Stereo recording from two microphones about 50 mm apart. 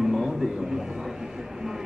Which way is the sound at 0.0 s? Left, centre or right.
Centre.